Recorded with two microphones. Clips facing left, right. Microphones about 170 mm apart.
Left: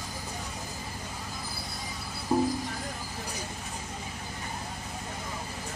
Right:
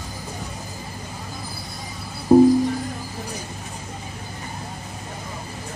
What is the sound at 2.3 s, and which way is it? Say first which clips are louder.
Music: right 14 dB; 45° right (ahead or behind).